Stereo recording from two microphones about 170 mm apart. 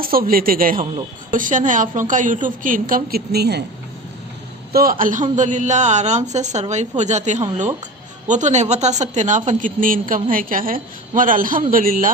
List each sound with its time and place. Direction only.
0.0 s a man's voice: 60° right (ahead or behind)
4.7 s a man's voice: 60° right (ahead or behind)